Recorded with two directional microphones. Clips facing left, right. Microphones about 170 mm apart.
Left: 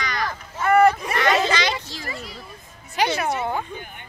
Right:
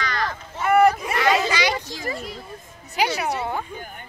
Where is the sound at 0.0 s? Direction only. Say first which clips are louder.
Right 1 dB; 15° left (ahead or behind).